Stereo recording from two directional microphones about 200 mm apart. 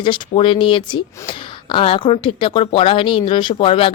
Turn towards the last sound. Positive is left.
turn(degrees=25)  # may be behind; listen again after turning